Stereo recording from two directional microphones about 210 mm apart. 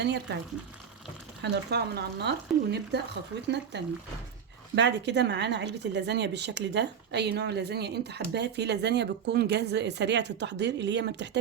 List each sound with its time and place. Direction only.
0.0 s speech: 55° right (ahead or behind)
1.4 s speech: 50° right (ahead or behind)